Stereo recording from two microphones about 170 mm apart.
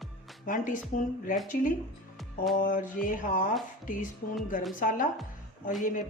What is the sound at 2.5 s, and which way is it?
Speech, 55° left (ahead or behind).